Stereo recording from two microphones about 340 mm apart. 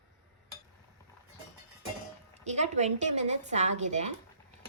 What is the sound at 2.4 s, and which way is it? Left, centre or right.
A woman's voice, centre.